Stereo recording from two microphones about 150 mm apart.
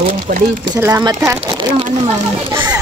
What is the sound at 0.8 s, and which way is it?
Speech, 25° right (ahead or behind).